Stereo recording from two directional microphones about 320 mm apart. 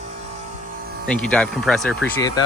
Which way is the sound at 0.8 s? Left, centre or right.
Right.